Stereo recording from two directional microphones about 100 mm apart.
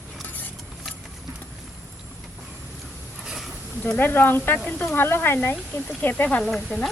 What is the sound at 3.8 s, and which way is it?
Speech, 20° left (ahead or behind).